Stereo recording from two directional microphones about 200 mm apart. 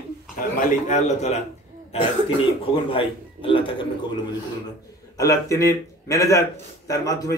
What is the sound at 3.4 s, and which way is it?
Speech, 25° left (ahead or behind).